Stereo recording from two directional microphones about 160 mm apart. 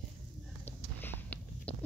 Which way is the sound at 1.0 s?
10° left (ahead or behind).